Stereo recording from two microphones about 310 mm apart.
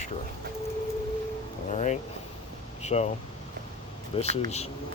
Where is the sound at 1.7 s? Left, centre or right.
Left.